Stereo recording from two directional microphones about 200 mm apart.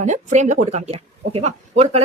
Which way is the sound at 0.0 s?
35° right (ahead or behind).